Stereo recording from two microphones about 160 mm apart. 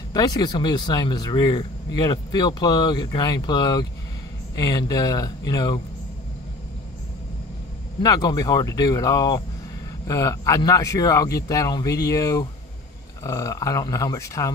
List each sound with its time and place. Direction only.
0.1 s speech: 25° left (ahead or behind)
8.0 s speech: 25° left (ahead or behind)